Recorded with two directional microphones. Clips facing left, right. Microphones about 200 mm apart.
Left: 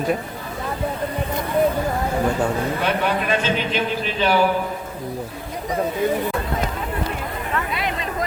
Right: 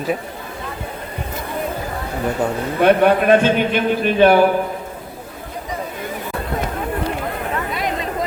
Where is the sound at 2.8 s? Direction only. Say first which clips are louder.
Right 8 dB; 55° right (ahead or behind).